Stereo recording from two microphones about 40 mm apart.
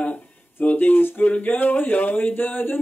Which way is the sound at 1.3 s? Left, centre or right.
Left.